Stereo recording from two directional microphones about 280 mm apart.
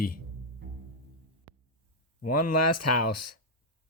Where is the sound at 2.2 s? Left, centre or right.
Left.